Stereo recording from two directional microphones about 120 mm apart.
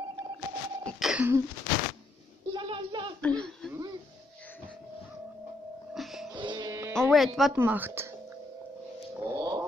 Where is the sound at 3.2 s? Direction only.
10° left (ahead or behind).